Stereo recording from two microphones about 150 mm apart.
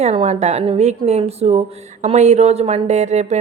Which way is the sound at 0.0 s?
45° right (ahead or behind).